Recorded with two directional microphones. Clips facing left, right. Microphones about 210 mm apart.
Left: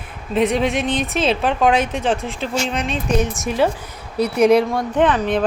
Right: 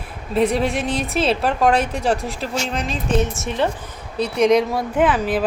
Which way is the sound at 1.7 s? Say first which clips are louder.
Left 1 dB; 35° right (ahead or behind).